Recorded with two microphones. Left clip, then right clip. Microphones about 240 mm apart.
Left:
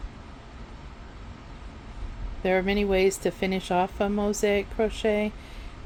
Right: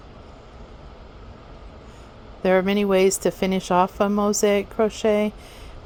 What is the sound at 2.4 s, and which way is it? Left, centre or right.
Speech, right.